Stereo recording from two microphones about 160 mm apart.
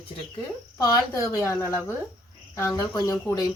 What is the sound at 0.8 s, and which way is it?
Speech, 20° left (ahead or behind).